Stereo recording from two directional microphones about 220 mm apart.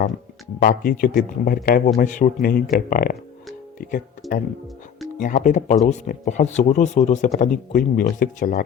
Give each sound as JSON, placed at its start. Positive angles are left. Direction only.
{"t": 0.6, "sound": "a man's voice", "side_deg": 40}
{"t": 4.2, "sound": "speech", "side_deg": 0}
{"t": 5.2, "sound": "a man's voice", "side_deg": 35}